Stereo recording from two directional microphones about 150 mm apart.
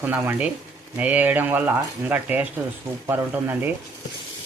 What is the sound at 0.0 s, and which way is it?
Speech, 10° right (ahead or behind).